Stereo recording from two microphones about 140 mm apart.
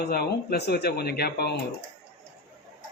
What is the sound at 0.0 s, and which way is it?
Speech, 90° left.